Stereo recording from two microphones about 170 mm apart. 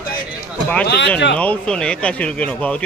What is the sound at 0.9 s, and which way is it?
Speech, 90° left.